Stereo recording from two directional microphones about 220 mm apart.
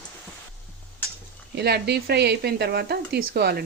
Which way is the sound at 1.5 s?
50° right (ahead or behind).